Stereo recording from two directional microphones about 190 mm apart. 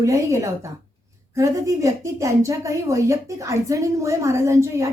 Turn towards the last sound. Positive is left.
turn(degrees=-15)  # may be behind; listen again after turning